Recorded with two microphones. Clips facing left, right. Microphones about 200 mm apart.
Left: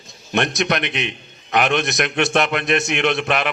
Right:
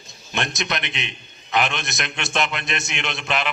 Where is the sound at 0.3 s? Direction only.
60° left (ahead or behind).